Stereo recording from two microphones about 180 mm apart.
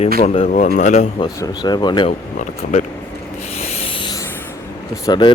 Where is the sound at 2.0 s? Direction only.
40° left (ahead or behind).